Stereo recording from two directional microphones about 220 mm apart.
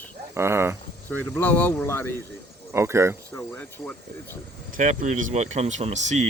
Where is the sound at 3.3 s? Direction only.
5° left (ahead or behind).